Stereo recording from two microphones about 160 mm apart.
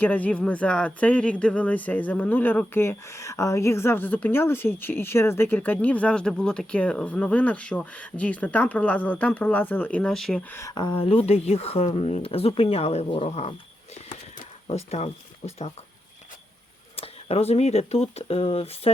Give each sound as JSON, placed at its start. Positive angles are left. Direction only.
{"t": 0.0, "sound": "speech", "side_deg": 10}
{"t": 10.5, "sound": "speech", "side_deg": 20}
{"t": 14.7, "sound": "speech", "side_deg": 40}
{"t": 17.0, "sound": "speech", "side_deg": 40}